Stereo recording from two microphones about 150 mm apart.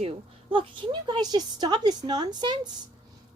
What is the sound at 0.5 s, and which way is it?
A woman's voice, 30° right (ahead or behind).